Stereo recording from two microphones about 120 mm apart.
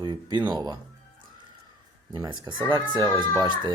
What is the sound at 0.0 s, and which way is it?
Speech, 35° right (ahead or behind).